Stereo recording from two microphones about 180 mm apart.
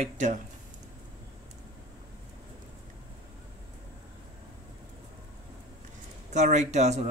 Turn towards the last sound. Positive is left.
turn(degrees=-40)  # may be behind; listen again after turning